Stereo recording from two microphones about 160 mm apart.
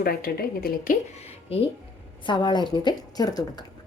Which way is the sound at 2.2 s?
30° left (ahead or behind).